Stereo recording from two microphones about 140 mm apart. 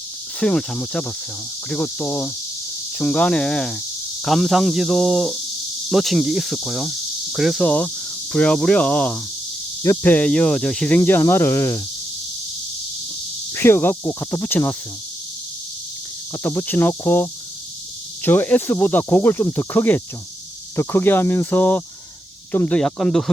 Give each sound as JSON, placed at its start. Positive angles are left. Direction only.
{"t": 0.3, "sound": "speech", "side_deg": 5}
{"t": 13.5, "sound": "speech", "side_deg": 15}
{"t": 16.4, "sound": "speech", "side_deg": 15}